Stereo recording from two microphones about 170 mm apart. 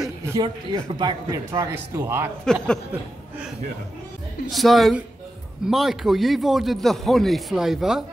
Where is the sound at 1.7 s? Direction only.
15° right (ahead or behind).